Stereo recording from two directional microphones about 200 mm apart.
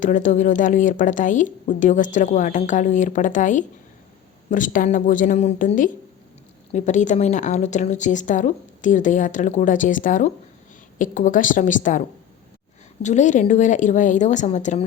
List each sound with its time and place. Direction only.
0.0 s a woman's voice: 40° left (ahead or behind)